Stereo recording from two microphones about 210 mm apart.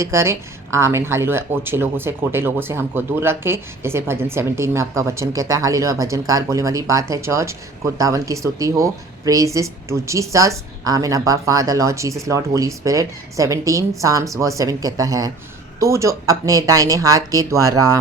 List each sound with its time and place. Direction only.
0.0 s speech: 15° right (ahead or behind)